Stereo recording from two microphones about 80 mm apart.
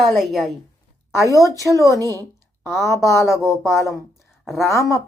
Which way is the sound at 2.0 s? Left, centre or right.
Right.